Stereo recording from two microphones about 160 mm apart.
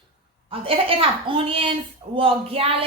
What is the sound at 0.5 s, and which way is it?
A woman's voice, 35° right (ahead or behind).